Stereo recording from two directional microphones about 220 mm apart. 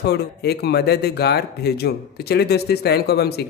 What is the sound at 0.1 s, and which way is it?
Speech, 45° left (ahead or behind).